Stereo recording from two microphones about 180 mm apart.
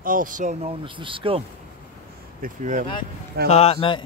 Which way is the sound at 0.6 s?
30° right (ahead or behind).